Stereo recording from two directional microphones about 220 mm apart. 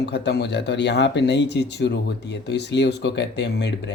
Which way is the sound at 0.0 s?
50° left (ahead or behind).